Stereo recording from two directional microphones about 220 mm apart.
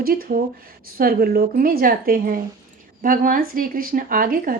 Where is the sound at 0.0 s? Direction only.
40° right (ahead or behind).